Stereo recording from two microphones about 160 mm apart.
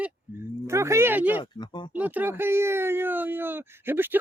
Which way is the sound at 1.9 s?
10° right (ahead or behind).